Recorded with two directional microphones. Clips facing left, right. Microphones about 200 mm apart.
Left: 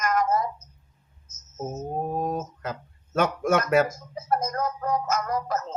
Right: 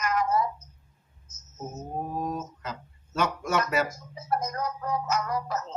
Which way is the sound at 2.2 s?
50° left (ahead or behind).